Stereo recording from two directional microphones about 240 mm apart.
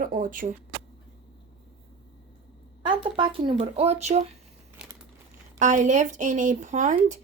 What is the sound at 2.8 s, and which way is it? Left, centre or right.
Speech, right.